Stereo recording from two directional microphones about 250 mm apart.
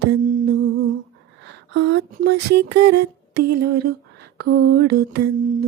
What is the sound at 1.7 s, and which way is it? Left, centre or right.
Music, right.